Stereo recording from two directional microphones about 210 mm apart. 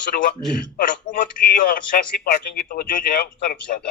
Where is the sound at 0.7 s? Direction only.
40° left (ahead or behind).